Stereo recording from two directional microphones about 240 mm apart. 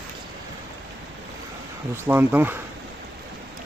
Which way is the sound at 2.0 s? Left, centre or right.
Centre.